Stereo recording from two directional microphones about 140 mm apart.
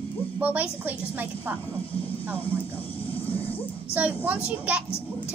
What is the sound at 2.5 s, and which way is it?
Speech, 15° left (ahead or behind).